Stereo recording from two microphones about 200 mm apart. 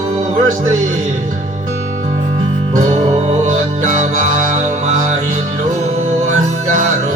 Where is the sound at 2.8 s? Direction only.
35° right (ahead or behind).